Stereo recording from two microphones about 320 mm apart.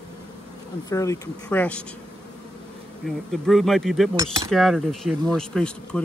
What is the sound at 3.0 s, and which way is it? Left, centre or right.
Speech, centre.